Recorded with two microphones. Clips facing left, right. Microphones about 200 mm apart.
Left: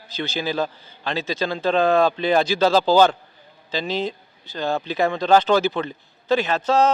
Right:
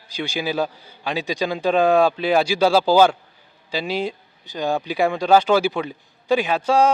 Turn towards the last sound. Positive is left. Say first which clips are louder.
# right 1 dB
turn(degrees=-10)  # may be behind; listen again after turning